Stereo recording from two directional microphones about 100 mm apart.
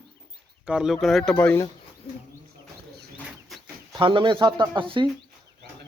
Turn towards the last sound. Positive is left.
turn(degrees=-55)  # may be behind; listen again after turning